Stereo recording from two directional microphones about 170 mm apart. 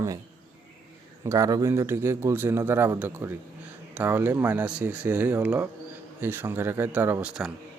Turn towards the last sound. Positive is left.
turn(degrees=-5)  # may be behind; listen again after turning